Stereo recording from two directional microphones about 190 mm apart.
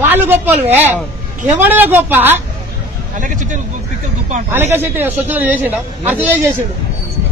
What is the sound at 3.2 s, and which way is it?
Speech, 40° right (ahead or behind).